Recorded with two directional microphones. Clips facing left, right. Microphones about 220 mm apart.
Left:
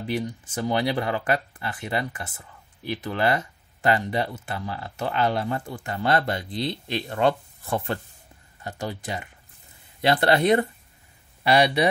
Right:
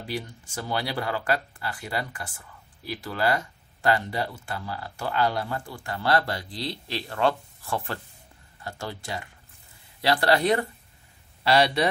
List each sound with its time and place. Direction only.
0.0 s speech: 20° left (ahead or behind)